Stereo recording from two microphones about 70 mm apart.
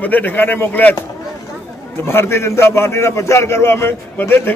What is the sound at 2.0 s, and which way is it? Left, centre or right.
A man's voice, left.